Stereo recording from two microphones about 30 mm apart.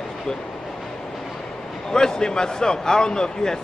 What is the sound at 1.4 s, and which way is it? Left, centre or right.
A man's voice, left.